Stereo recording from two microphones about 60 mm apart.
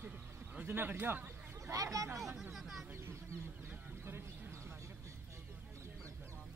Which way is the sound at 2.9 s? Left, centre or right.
Right.